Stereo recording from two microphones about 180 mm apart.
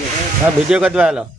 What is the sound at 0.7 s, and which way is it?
Speech, 5° right (ahead or behind).